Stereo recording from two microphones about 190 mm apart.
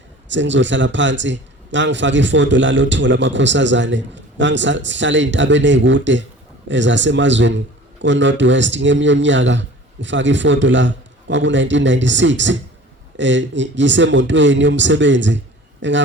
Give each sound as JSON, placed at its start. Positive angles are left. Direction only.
{"t": 0.3, "sound": "a man's voice", "side_deg": -75}